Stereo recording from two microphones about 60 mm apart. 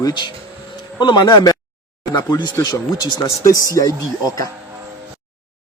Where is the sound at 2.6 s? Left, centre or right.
Left.